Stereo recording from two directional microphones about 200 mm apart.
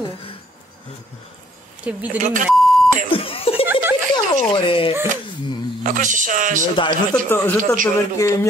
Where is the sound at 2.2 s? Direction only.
40° right (ahead or behind).